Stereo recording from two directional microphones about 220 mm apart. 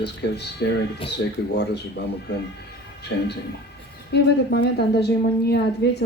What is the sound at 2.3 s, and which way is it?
Speech, 50° left (ahead or behind).